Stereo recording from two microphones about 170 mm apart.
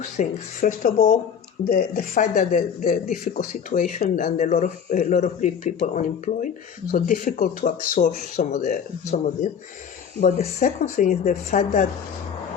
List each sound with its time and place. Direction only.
0.0 s speech: 50° left (ahead or behind)